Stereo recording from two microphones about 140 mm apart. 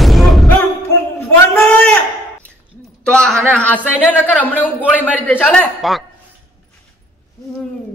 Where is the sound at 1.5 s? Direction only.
15° left (ahead or behind).